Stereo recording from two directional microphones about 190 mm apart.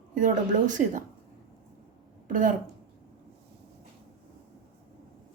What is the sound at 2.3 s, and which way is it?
Speech, 45° right (ahead or behind).